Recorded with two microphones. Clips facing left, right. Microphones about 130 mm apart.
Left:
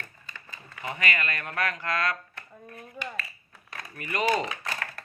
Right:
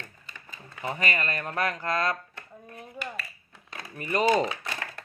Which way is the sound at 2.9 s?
5° right (ahead or behind).